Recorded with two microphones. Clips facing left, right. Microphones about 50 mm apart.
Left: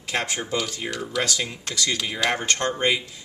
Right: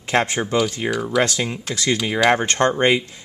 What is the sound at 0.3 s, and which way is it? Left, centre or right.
Speech, right.